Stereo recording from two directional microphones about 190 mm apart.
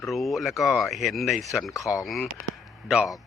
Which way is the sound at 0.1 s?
Centre (ahead or behind).